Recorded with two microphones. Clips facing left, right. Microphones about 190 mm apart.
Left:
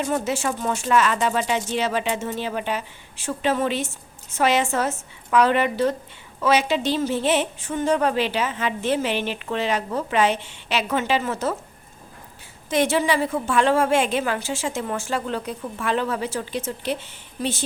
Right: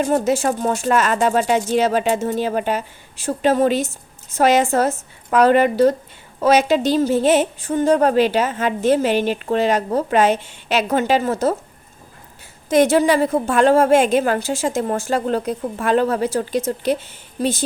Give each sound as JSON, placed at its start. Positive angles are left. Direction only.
{"t": 0.0, "sound": "a woman's voice", "side_deg": -45}
{"t": 12.7, "sound": "a woman's voice", "side_deg": -45}